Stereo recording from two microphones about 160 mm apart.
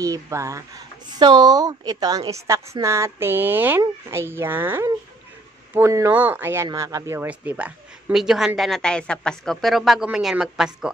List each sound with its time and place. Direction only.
0.0 s a woman's voice: 20° right (ahead or behind); by 10.9 s 5° right (ahead or behind)